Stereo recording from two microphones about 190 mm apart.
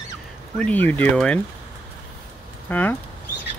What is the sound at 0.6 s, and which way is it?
Speech, 10° left (ahead or behind).